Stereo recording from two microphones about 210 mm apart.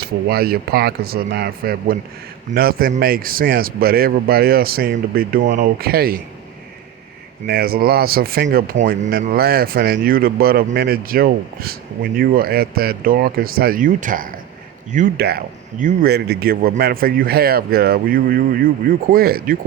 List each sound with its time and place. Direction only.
0.0 s speech: 50° right (ahead or behind)
7.4 s speech: 45° right (ahead or behind)